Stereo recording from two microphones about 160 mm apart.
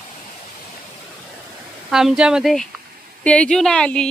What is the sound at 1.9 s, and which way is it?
Speech, 5° right (ahead or behind).